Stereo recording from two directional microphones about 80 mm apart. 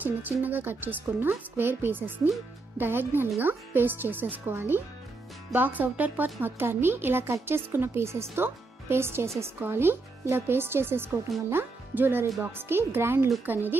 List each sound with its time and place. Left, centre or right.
0.0 s a woman's voice: right